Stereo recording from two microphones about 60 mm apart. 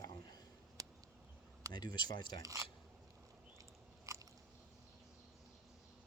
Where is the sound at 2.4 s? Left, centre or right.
Right.